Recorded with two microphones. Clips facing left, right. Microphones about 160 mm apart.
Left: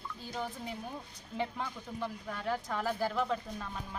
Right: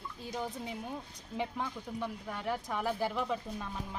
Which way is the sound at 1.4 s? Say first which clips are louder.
Even; 10° right (ahead or behind).